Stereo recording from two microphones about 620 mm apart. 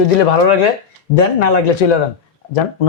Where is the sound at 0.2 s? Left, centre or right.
Left.